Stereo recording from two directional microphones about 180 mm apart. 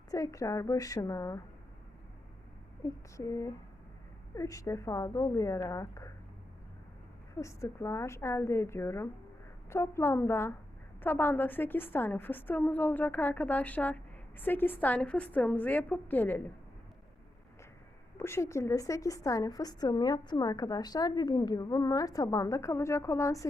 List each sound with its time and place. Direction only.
0.1 s a woman's voice: 20° left (ahead or behind)
2.8 s a woman's voice: 15° left (ahead or behind)
7.3 s a woman's voice: 15° left (ahead or behind)
18.2 s a woman's voice: 15° left (ahead or behind)